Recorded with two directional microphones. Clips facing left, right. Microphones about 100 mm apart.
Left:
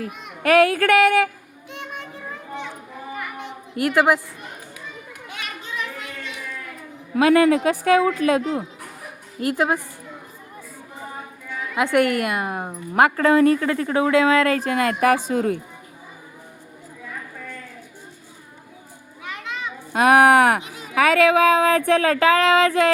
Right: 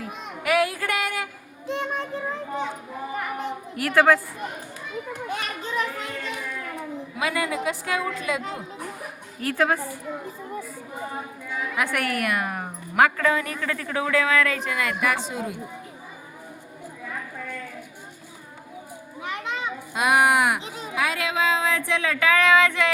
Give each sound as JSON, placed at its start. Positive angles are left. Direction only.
{"t": 0.4, "sound": "speech", "side_deg": 55}
{"t": 1.6, "sound": "a child's voice", "side_deg": -35}
{"t": 3.9, "sound": "a woman's voice", "side_deg": 15}
{"t": 5.3, "sound": "children playing", "side_deg": -40}
{"t": 7.2, "sound": "speech", "side_deg": 60}
{"t": 9.5, "sound": "a woman's voice", "side_deg": 15}
{"t": 11.8, "sound": "a woman's voice", "side_deg": 25}
{"t": 19.2, "sound": "children playing", "side_deg": -20}
{"t": 19.9, "sound": "speech", "side_deg": 50}
{"t": 20.9, "sound": "speech", "side_deg": 65}